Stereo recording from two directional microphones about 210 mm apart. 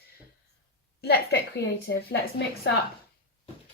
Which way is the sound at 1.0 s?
50° left (ahead or behind).